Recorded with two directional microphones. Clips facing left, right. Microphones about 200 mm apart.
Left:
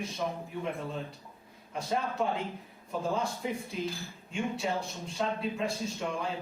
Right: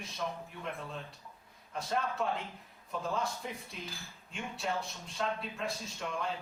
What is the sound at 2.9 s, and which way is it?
Speech, 30° left (ahead or behind).